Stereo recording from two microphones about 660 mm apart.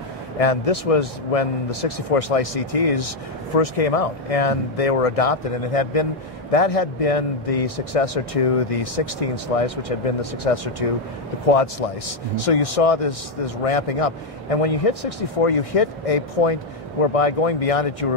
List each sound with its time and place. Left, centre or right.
0.4 s a man's voice: left